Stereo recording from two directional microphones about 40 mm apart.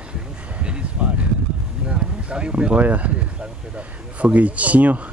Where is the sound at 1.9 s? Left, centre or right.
Right.